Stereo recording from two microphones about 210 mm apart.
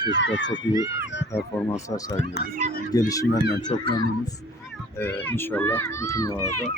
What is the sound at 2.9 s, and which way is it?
Speech, 15° left (ahead or behind).